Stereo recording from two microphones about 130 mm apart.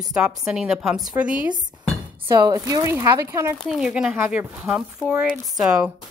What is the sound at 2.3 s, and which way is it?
Speech, 30° right (ahead or behind).